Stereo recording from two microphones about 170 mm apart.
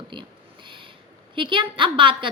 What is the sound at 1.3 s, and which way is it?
Speech, 30° right (ahead or behind).